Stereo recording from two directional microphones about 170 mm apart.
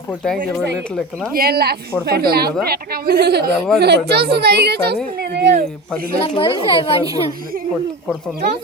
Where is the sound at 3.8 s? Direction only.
70° right (ahead or behind).